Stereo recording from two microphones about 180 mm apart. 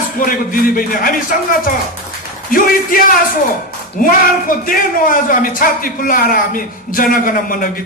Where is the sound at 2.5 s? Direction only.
50° left (ahead or behind).